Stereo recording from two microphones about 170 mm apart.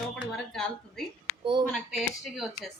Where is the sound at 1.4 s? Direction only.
30° right (ahead or behind).